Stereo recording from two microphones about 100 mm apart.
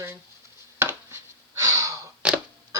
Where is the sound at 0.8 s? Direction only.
25° right (ahead or behind).